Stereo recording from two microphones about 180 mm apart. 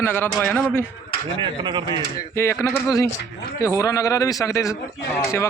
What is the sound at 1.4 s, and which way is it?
Speech, 25° right (ahead or behind).